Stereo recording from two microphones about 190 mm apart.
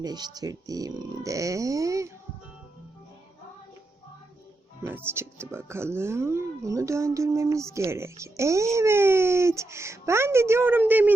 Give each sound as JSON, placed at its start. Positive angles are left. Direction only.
{"t": 0.0, "sound": "speech", "side_deg": -20}
{"t": 4.8, "sound": "speech", "side_deg": -10}